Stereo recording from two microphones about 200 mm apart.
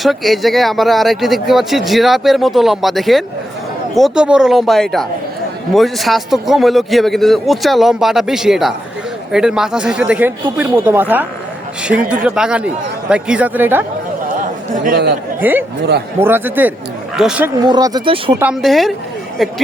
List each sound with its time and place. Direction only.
0.0 s speech: centre (ahead or behind)
14.8 s speech: 55° right (ahead or behind)
15.4 s speech: 10° right (ahead or behind)
17.6 s speech: 20° right (ahead or behind)
18.3 s speech: 5° right (ahead or behind)